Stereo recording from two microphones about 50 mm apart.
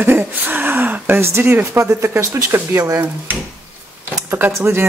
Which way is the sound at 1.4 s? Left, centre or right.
Right.